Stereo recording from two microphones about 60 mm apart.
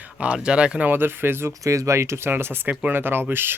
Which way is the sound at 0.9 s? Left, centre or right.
Right.